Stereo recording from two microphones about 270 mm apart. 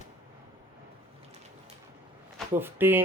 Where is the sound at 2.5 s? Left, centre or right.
Centre.